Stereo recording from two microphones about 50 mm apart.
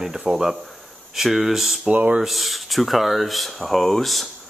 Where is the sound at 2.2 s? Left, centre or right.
Centre.